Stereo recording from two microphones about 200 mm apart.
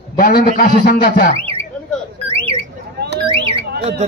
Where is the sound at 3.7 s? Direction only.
55° right (ahead or behind).